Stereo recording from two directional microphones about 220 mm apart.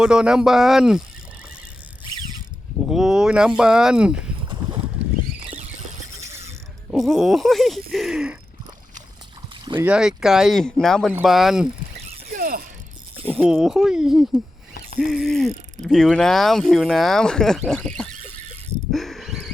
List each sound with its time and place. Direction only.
0.0 s speech: 5° right (ahead or behind)
2.9 s speech: centre (ahead or behind)
4.4 s a sound: 20° right (ahead or behind)
6.2 s pulleys: 10° right (ahead or behind)
6.9 s speech: centre (ahead or behind)
9.8 s speech: 5° right (ahead or behind)
12.3 s mechanisms: 40° right (ahead or behind)
13.3 s speech: 5° right (ahead or behind)
18.1 s a sound: 30° right (ahead or behind)
18.9 s dog: centre (ahead or behind)